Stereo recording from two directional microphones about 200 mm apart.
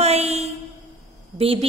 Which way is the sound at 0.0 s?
30° right (ahead or behind).